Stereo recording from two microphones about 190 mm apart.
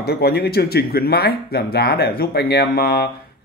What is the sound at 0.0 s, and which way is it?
Speech, 55° left (ahead or behind).